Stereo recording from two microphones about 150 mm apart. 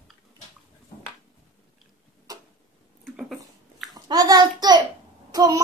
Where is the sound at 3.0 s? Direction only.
Centre (ahead or behind).